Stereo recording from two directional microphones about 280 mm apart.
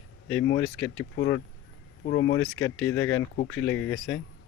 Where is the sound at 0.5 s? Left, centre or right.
Centre.